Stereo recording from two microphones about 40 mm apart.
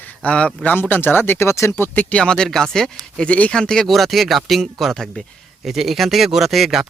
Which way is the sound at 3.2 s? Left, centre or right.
Left.